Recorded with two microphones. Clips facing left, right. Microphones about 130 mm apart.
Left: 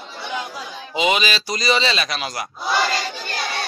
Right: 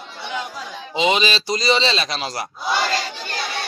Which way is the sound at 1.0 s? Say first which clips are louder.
Right 1 dB; 25° right (ahead or behind).